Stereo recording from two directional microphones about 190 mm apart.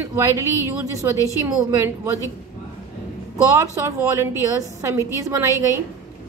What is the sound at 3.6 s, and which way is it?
Speech, 15° right (ahead or behind).